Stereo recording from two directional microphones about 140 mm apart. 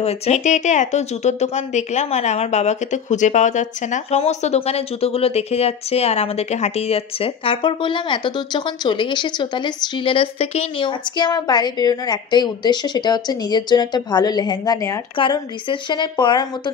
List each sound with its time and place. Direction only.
0.0 s speech: 50° left (ahead or behind); by 15.0 s 25° left (ahead or behind)
15.1 s a woman's voice: 35° left (ahead or behind)